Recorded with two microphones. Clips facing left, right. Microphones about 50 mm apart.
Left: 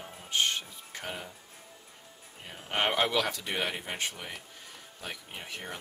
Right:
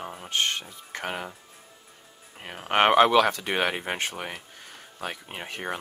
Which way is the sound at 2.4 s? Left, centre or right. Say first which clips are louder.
Right 9 dB; right.